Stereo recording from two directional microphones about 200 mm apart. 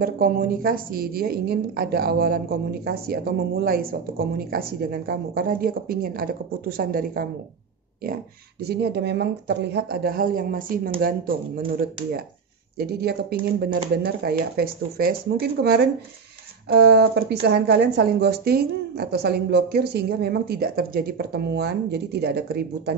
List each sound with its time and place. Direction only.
0.0 s speech: 50° right (ahead or behind)
8.6 s speech: 55° right (ahead or behind)
12.7 s speech: 55° right (ahead or behind)